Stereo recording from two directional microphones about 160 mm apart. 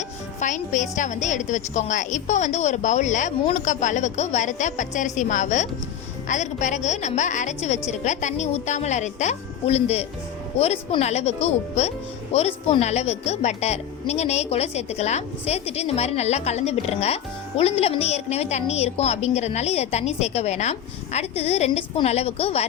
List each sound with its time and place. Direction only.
0.3 s a woman's voice: 50° left (ahead or behind)